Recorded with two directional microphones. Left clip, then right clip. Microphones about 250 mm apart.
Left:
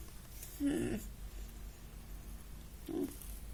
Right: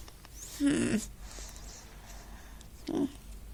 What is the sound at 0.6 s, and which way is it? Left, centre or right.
Speech, right.